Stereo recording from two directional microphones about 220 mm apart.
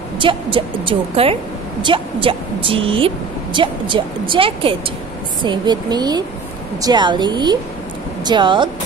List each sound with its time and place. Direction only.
0.2 s a woman's voice: 25° right (ahead or behind)